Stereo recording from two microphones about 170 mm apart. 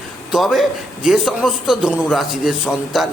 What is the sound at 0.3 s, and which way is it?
A man's voice, centre (ahead or behind).